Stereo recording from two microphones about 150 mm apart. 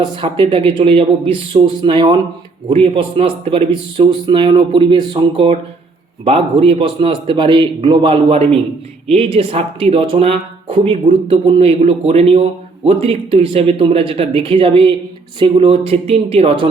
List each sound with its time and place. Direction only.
0.2 s speech: 35° right (ahead or behind)